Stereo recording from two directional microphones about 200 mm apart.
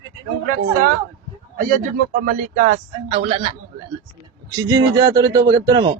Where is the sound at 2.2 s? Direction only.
45° right (ahead or behind).